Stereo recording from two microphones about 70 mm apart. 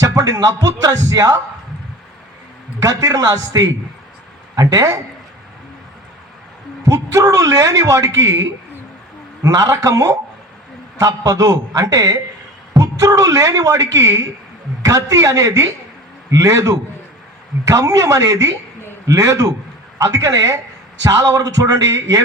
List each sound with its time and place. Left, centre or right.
0.0 s a sound: right
0.8 s a man's voice: right
2.8 s a man's voice: right
6.8 s a man's voice: right